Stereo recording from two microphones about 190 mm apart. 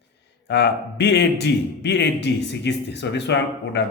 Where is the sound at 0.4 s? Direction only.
60° left (ahead or behind).